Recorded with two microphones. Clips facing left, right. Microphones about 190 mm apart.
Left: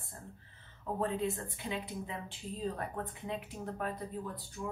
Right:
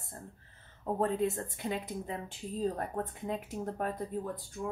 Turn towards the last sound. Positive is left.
turn(degrees=-50)  # may be behind; listen again after turning